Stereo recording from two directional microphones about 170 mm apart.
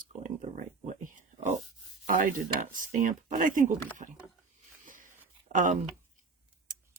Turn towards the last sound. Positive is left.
turn(degrees=-45)  # may be behind; listen again after turning